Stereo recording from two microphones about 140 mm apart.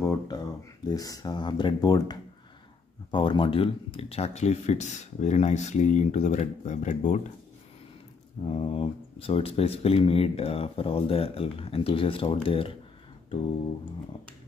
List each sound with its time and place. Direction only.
0.0 s a sound: 20° left (ahead or behind)
0.8 s speech: 25° left (ahead or behind); by 7.2 s 60° left (ahead or behind)
8.5 s speech: 40° left (ahead or behind)